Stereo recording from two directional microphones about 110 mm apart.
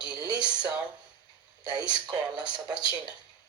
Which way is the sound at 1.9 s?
40° right (ahead or behind).